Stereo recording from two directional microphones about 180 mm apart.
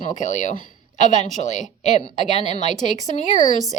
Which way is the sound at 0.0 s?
45° left (ahead or behind).